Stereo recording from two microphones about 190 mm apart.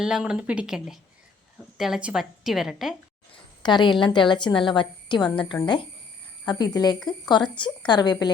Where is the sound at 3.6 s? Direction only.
25° left (ahead or behind).